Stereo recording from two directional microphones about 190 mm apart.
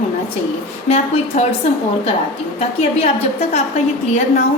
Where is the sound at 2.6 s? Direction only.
35° left (ahead or behind).